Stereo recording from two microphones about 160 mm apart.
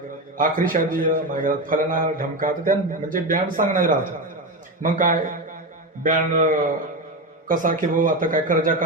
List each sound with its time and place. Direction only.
0.3 s a man's voice: 60° right (ahead or behind)
7.4 s a man's voice: 55° right (ahead or behind)